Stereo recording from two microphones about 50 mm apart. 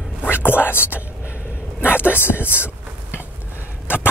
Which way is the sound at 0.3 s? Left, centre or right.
Left.